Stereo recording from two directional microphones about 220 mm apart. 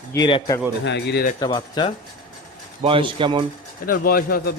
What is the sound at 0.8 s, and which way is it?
Speech, 50° left (ahead or behind).